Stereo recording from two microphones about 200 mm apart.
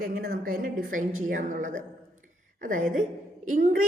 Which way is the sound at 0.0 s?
45° right (ahead or behind).